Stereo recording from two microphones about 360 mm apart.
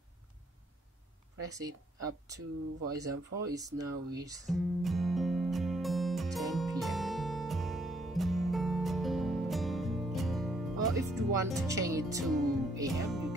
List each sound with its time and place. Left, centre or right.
1.5 s speech: centre
3.0 s speech: centre
4.6 s music: centre